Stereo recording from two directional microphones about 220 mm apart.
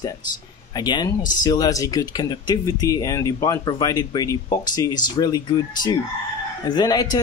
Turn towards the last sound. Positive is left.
turn(degrees=15)  # may be behind; listen again after turning